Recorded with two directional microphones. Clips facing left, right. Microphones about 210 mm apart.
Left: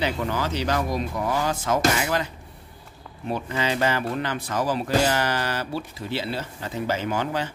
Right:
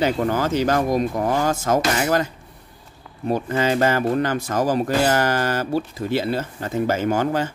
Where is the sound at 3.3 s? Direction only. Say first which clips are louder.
Right 6 dB; 45° right (ahead or behind).